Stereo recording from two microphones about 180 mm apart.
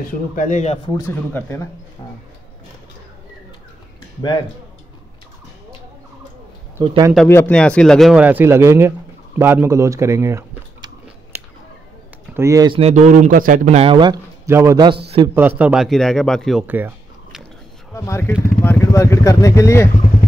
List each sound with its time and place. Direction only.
0.4 s speech: 40° left (ahead or behind)
0.8 s speech: 15° left (ahead or behind)
6.8 s speech: 25° right (ahead or behind)
7.2 s a man's voice: 10° left (ahead or behind); by 10.9 s 15° right (ahead or behind)
11.3 s a sound: 15° right (ahead or behind)
12.4 s a man's voice: 15° right (ahead or behind)
12.7 s a man's voice: 35° right (ahead or behind); by 16.6 s centre (ahead or behind)
16.6 s a sound: 10° right (ahead or behind)
17.9 s speech: 15° left (ahead or behind)